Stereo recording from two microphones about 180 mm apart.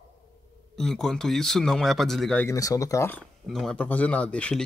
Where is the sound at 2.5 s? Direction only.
20° left (ahead or behind).